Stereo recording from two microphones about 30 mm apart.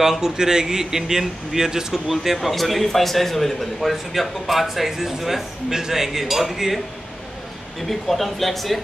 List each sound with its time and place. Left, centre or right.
0.0 s speech: centre
2.3 s speech: centre
7.8 s speech: centre